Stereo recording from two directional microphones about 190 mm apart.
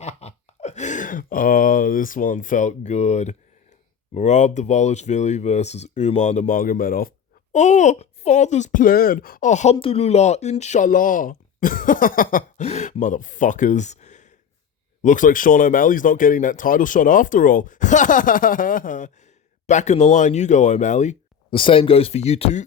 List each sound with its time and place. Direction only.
0.0 s a sound: 35° left (ahead or behind)
4.1 s speech: 40° left (ahead or behind)
7.5 s speech: 40° left (ahead or behind)